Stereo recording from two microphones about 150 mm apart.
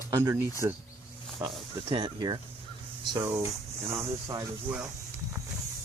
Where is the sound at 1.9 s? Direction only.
30° right (ahead or behind).